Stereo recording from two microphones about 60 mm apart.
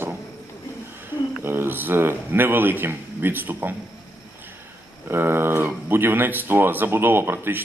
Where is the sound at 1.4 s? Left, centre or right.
Right.